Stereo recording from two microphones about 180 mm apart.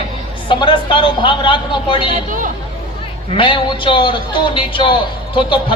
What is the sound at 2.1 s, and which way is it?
Speech, 50° right (ahead or behind).